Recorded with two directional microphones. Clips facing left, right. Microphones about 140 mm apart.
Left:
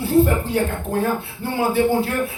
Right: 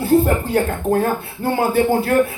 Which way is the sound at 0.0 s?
45° right (ahead or behind).